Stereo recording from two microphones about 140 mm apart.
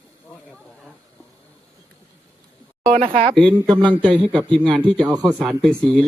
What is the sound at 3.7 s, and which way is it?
Speech, 35° right (ahead or behind).